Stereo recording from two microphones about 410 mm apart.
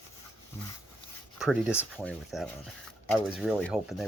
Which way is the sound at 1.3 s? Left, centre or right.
Centre.